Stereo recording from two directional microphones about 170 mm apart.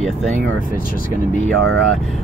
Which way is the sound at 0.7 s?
60° left (ahead or behind).